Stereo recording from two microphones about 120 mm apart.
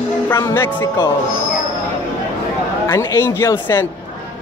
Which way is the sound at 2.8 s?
20° left (ahead or behind).